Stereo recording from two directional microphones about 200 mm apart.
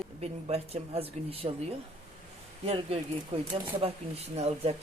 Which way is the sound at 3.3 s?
30° right (ahead or behind).